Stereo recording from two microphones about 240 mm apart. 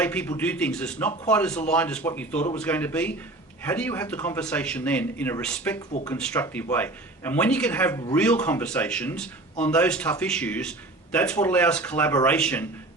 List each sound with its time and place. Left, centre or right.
0.0 s speech: centre